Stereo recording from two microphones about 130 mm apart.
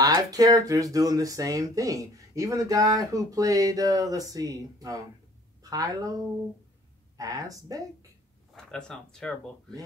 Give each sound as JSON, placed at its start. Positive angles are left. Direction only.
{"t": 0.0, "sound": "a woman's voice", "side_deg": -30}
{"t": 7.2, "sound": "speech", "side_deg": -25}
{"t": 8.5, "sound": "speech", "side_deg": 5}